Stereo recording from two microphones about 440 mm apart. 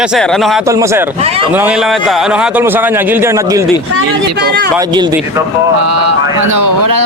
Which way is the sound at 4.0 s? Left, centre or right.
Right.